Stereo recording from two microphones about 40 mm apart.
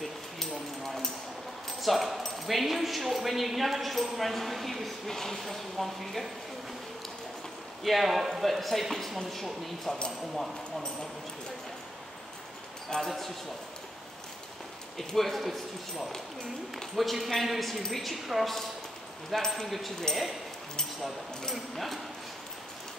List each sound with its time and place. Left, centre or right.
0.4 s a sound: centre
1.8 s a woman's voice: centre
7.8 s a woman's voice: centre
13.0 s a woman's voice: centre
15.0 s a woman's voice: centre
16.9 s a woman's voice: centre
21.5 s a woman's voice: centre